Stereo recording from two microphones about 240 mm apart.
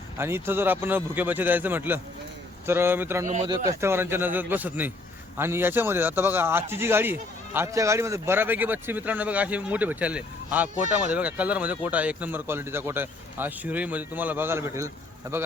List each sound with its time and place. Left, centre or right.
0.2 s a man's voice: centre
3.2 s speech: right
3.5 s a man's voice: centre